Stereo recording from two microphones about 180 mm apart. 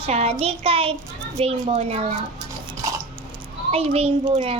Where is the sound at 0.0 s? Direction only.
35° right (ahead or behind).